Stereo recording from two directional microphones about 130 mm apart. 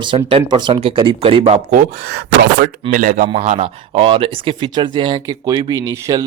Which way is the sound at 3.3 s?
60° right (ahead or behind).